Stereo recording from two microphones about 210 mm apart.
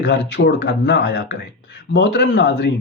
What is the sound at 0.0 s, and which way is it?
Speech, 55° left (ahead or behind).